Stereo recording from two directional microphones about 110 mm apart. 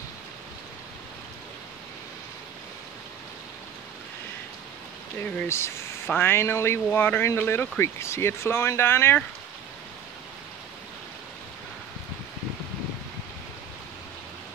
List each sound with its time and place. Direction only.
5.2 s speech: 25° left (ahead or behind)